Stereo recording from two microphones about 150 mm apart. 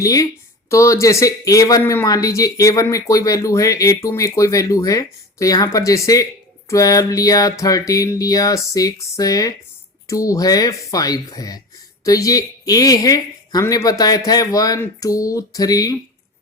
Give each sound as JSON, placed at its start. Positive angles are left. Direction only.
{"t": 0.0, "sound": "speech", "side_deg": 20}